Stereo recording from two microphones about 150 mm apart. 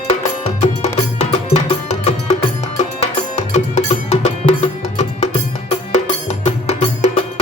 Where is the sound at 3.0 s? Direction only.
45° left (ahead or behind).